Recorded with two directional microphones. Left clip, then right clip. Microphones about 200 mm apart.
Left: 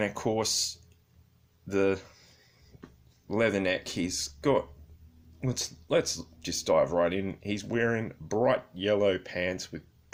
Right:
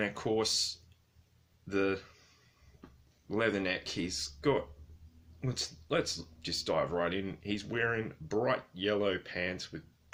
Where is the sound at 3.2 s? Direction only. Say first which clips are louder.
Left 5 dB; 40° left (ahead or behind).